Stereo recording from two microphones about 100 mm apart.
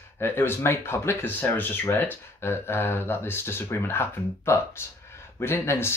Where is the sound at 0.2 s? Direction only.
25° left (ahead or behind).